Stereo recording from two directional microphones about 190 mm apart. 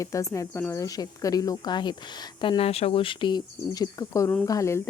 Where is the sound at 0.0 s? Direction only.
15° left (ahead or behind).